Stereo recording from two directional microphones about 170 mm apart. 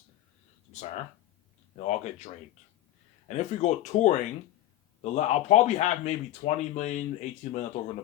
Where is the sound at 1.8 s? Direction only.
40° left (ahead or behind).